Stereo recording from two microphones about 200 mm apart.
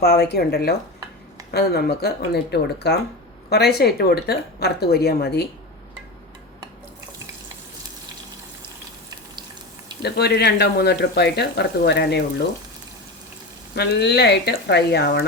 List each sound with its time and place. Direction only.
0.0 s a woman's voice: 55° left (ahead or behind)
10.0 s speech: 55° left (ahead or behind)
13.7 s speech: 55° left (ahead or behind)